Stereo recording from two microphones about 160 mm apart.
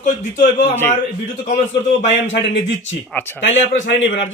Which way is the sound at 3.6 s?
45° left (ahead or behind).